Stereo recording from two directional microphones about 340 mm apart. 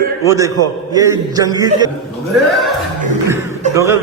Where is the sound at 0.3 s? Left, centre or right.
Centre.